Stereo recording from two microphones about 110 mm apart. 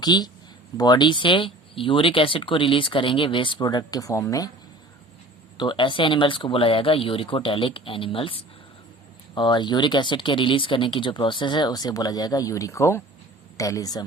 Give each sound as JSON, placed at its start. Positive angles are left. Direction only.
{"t": 0.0, "sound": "speech", "side_deg": 40}
{"t": 5.5, "sound": "speech", "side_deg": 45}